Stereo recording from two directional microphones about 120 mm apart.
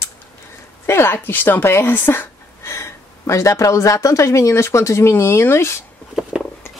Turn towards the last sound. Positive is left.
turn(degrees=-5)  # may be behind; listen again after turning